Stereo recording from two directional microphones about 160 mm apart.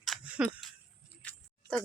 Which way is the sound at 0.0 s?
5° right (ahead or behind).